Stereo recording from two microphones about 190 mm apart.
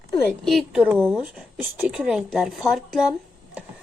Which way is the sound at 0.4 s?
Centre (ahead or behind).